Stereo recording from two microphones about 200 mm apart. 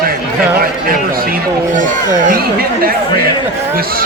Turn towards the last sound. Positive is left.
turn(degrees=-50)  # may be behind; listen again after turning